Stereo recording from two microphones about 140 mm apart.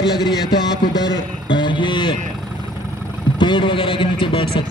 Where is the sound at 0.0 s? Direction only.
30° left (ahead or behind).